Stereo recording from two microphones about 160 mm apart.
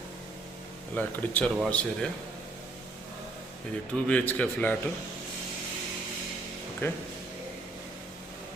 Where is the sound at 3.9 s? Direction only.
10° left (ahead or behind).